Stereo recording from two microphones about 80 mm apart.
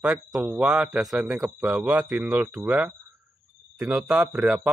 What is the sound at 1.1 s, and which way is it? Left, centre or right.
Speech, centre.